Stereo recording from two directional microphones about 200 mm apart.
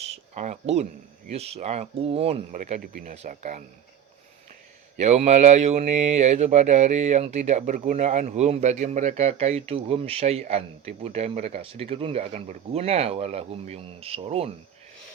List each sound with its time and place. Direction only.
0.0 s a sound: 35° right (ahead or behind)
1.3 s speech: 30° right (ahead or behind)
4.9 s speech: 35° right (ahead or behind)